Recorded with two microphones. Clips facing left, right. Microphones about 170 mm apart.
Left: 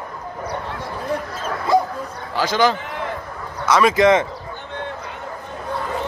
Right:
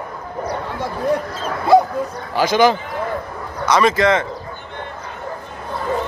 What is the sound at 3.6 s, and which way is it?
Speech, 5° left (ahead or behind).